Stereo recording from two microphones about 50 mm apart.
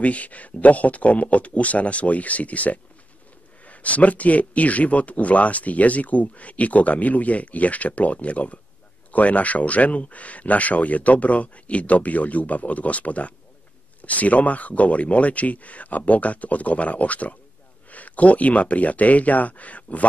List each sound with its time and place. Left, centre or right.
0.0 s speech: left